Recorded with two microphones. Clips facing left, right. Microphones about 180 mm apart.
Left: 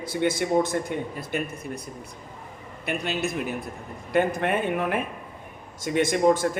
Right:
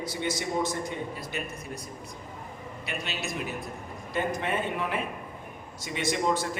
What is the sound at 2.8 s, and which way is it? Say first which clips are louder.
A man's voice: left 8 dB; 55° left (ahead or behind).